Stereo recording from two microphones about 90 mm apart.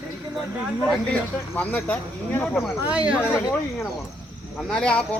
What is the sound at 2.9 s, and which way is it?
Speech, 15° right (ahead or behind).